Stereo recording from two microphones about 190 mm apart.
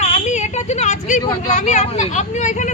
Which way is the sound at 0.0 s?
40° left (ahead or behind).